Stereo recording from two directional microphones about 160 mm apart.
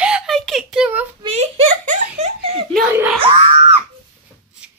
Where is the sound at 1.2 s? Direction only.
40° right (ahead or behind).